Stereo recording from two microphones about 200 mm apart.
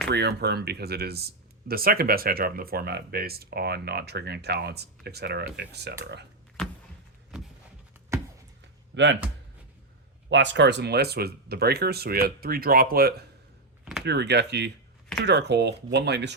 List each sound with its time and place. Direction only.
0.1 s speech: 55° right (ahead or behind)
7.3 s a sound: 5° right (ahead or behind)
8.9 s speech: 65° right (ahead or behind)
10.2 s speech: 65° right (ahead or behind)